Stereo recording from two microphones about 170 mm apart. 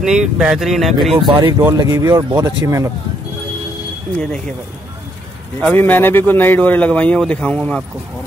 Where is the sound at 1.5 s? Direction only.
20° right (ahead or behind).